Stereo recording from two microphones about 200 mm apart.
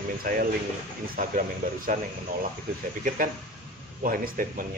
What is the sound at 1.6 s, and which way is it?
Speech, 45° right (ahead or behind).